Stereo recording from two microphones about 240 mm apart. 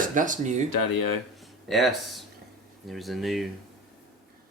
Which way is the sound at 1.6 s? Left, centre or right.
Centre.